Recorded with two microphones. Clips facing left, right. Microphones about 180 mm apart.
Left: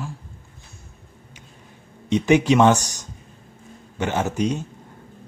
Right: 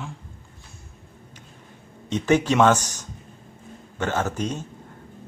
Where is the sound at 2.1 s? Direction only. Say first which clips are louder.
Left 3 dB; 15° left (ahead or behind).